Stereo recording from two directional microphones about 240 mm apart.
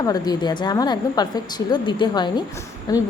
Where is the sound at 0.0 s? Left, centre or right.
Centre.